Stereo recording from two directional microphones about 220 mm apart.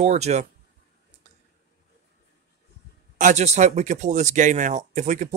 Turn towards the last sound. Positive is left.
turn(degrees=-35)  # may be behind; listen again after turning